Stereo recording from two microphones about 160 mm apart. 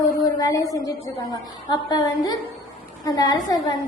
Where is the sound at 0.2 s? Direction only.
20° left (ahead or behind).